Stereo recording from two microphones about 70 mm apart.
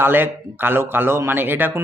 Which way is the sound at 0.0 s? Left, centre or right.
Right.